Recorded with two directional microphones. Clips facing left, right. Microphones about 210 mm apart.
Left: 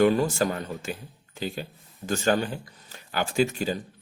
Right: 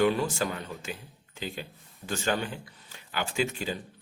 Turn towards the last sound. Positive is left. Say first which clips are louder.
# left 6 dB
turn(degrees=40)  # may be behind; listen again after turning